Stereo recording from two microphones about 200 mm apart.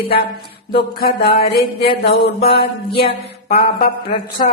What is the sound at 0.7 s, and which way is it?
Music, 50° left (ahead or behind).